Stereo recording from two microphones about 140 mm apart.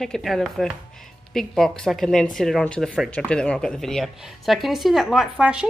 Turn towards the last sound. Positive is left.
turn(degrees=-5)  # may be behind; listen again after turning